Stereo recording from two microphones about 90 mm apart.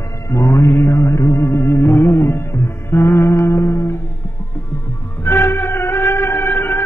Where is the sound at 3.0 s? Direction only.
35° left (ahead or behind).